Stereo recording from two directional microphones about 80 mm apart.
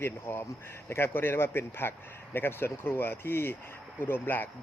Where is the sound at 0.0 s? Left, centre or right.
Left.